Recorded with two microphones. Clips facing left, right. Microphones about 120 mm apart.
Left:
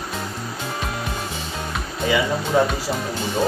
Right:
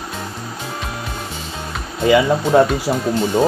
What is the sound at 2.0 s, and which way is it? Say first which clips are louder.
Speech: right 7 dB; 65° right (ahead or behind).